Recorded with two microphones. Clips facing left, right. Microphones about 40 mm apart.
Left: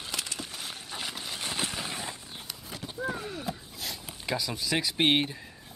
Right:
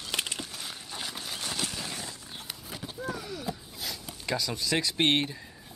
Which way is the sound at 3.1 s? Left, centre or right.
Left.